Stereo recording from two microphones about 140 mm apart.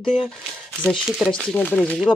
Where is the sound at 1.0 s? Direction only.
Centre (ahead or behind).